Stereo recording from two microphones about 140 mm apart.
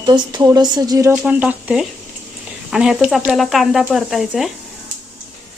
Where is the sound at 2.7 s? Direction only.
5° right (ahead or behind).